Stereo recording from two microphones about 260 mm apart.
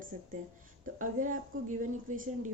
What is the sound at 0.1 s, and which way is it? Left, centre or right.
A woman's voice, right.